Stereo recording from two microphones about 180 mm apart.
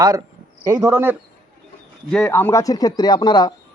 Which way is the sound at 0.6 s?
20° right (ahead or behind).